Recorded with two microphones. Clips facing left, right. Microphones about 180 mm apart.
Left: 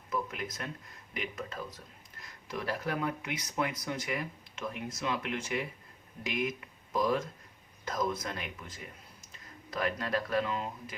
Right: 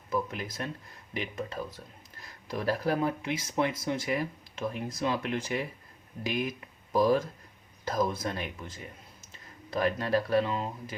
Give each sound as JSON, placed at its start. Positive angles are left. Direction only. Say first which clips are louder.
{"t": 0.1, "sound": "speech", "louder": "right 4 dB", "side_deg": -30}